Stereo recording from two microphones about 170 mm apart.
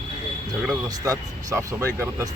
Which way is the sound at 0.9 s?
20° right (ahead or behind).